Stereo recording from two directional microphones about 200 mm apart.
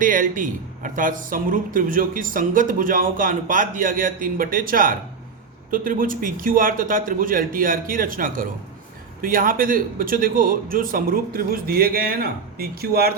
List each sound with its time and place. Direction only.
0.0 s speech: 45° right (ahead or behind)